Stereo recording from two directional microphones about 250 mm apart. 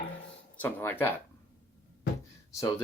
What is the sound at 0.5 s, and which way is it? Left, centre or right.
Speech, centre.